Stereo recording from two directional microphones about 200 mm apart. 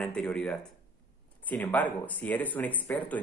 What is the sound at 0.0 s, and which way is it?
Speech, 5° left (ahead or behind).